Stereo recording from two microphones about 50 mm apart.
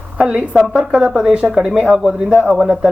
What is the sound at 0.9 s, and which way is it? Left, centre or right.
Speech, centre.